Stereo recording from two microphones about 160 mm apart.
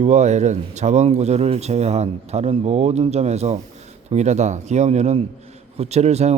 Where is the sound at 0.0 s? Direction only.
45° right (ahead or behind).